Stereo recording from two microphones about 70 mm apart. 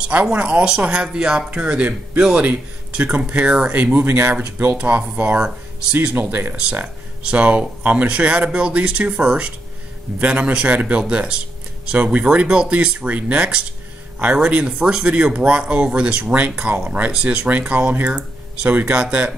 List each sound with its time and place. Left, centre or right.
0.0 s speech: centre